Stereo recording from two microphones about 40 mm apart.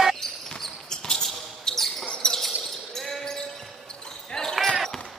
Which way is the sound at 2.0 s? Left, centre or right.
Left.